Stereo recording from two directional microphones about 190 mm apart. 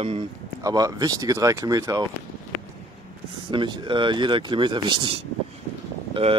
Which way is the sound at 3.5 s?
25° right (ahead or behind).